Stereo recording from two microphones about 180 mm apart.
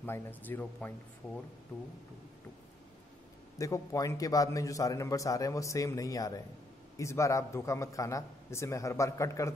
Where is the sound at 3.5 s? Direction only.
20° left (ahead or behind).